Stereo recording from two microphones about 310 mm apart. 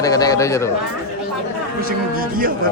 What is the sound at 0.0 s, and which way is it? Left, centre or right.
Speech, centre.